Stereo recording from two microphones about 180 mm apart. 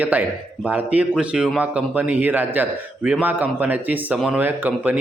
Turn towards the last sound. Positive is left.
turn(degrees=-10)  # may be behind; listen again after turning